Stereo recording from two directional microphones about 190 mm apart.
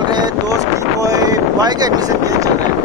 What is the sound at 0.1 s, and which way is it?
Boat, 20° right (ahead or behind).